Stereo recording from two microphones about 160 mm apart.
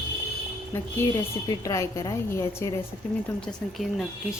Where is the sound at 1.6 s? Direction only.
20° left (ahead or behind).